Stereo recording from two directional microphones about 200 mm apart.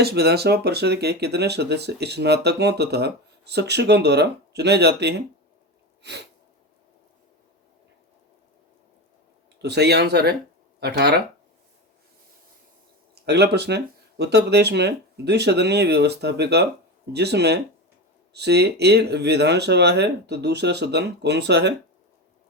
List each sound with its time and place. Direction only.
0.0 s speech: 55° right (ahead or behind)
6.0 s sneeze: 60° right (ahead or behind)
9.6 s speech: 55° right (ahead or behind)
13.2 s speech: 55° right (ahead or behind)